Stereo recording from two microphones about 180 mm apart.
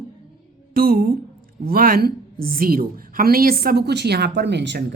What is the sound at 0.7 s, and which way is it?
A woman's voice, 55° right (ahead or behind).